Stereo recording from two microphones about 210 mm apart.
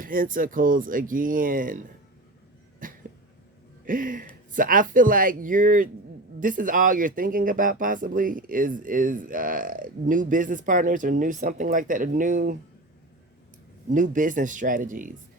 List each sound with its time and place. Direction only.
0.0 s speech: 40° right (ahead or behind)
2.8 s cat: 40° right (ahead or behind)
3.8 s speech: 40° right (ahead or behind)
13.9 s speech: 40° right (ahead or behind)